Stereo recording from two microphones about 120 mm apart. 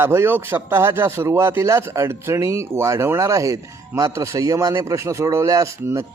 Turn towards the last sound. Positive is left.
turn(degrees=-25)  # may be behind; listen again after turning